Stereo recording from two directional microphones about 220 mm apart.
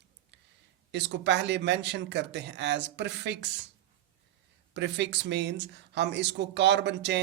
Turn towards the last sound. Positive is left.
turn(degrees=-50)  # may be behind; listen again after turning